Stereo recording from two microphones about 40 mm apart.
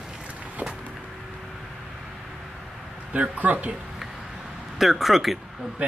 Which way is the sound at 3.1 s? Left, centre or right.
Right.